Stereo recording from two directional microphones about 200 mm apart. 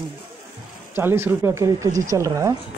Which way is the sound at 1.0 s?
10° right (ahead or behind).